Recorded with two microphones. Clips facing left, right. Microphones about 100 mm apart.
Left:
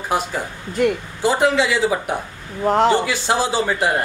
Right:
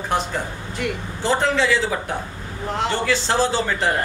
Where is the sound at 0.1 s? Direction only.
5° left (ahead or behind).